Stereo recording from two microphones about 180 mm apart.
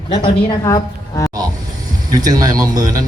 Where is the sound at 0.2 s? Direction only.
20° left (ahead or behind).